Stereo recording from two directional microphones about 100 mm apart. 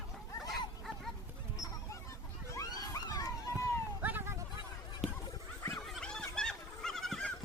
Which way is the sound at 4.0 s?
20° right (ahead or behind).